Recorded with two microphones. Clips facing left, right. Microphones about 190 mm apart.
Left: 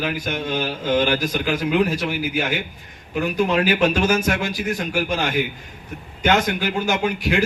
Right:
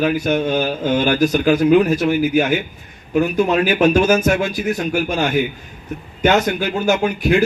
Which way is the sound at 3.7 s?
50° right (ahead or behind).